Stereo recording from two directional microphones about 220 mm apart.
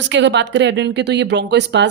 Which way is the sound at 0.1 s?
55° right (ahead or behind).